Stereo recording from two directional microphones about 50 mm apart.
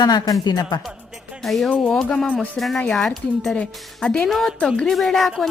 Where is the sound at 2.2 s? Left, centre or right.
Left.